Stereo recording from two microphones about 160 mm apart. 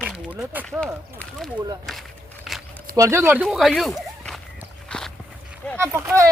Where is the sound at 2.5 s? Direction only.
Centre (ahead or behind).